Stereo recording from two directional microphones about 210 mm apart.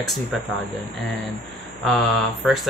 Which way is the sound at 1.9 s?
Centre (ahead or behind).